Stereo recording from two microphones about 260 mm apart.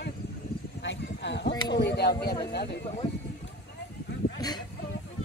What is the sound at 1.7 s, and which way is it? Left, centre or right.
Speech, left.